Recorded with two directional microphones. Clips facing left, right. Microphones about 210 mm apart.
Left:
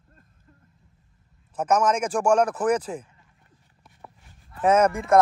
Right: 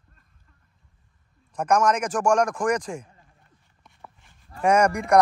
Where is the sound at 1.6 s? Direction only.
5° left (ahead or behind).